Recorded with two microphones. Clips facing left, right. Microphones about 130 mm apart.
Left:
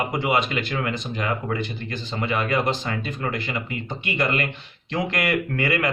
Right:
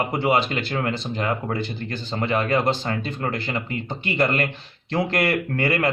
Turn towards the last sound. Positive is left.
turn(degrees=-35)  # may be behind; listen again after turning